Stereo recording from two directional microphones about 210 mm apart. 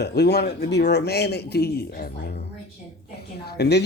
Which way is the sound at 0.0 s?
50° left (ahead or behind).